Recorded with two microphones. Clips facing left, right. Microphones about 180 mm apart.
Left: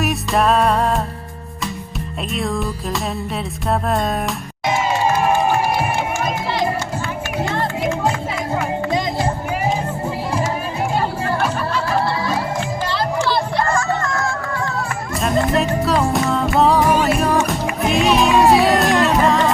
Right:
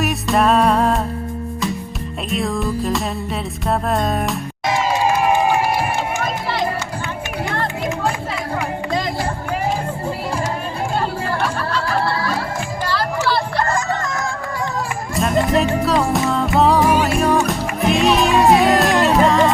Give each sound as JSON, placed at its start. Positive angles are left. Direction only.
{"t": 0.0, "sound": "music", "side_deg": 0}
{"t": 2.3, "sound": "music", "side_deg": 0}
{"t": 11.3, "sound": "music", "side_deg": 20}
{"t": 13.7, "sound": "music", "side_deg": -20}
{"t": 15.1, "sound": "music", "side_deg": 0}